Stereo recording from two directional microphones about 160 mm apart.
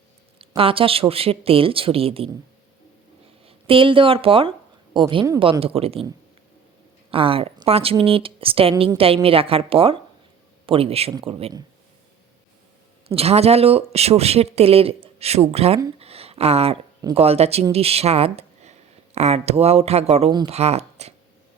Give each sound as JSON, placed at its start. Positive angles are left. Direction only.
{"t": 0.3, "sound": "speech", "side_deg": -35}
{"t": 3.4, "sound": "speech", "side_deg": -35}
{"t": 7.1, "sound": "speech", "side_deg": -35}
{"t": 13.1, "sound": "speech", "side_deg": -40}
{"t": 16.0, "sound": "a sound", "side_deg": -40}
{"t": 17.2, "sound": "speech", "side_deg": -40}